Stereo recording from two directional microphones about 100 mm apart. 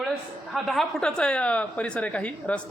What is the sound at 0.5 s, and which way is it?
A man's voice, centre (ahead or behind).